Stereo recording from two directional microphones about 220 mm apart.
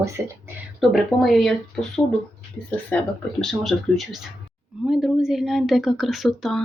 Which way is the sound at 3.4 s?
Centre (ahead or behind).